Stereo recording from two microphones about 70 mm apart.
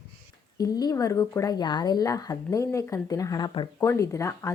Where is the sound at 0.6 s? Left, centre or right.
Left.